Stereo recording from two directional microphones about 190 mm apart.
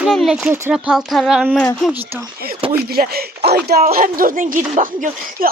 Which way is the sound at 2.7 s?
55° right (ahead or behind).